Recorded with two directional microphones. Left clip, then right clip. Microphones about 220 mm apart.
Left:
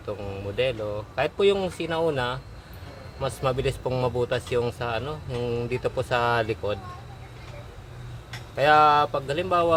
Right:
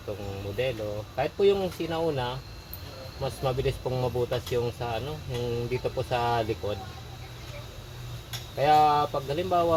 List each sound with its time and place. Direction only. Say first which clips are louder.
0.5 s speech: left 4 dB; 5° left (ahead or behind)
4.3 s speech: left 3 dB; 5° left (ahead or behind)
8.5 s speech: left 3 dB; 10° left (ahead or behind)